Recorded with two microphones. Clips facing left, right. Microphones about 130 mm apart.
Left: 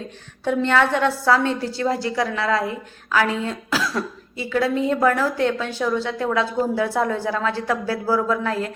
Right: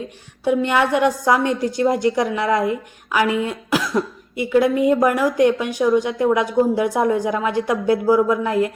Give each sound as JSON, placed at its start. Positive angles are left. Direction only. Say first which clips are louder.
{"t": 0.4, "sound": "a woman's voice", "louder": "right 1 dB", "side_deg": -10}